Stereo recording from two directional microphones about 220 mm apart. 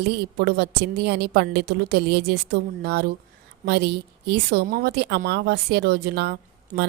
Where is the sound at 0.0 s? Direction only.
50° right (ahead or behind).